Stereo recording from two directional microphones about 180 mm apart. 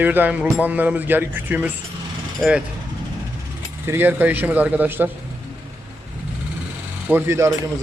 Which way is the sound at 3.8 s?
10° right (ahead or behind).